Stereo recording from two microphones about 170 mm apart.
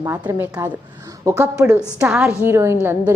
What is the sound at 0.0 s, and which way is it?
A woman's voice, 15° right (ahead or behind).